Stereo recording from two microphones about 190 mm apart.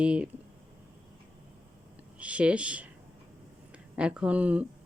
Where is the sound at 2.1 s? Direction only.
5° right (ahead or behind).